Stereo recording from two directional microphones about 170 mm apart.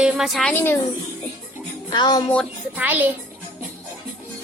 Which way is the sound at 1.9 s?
25° left (ahead or behind).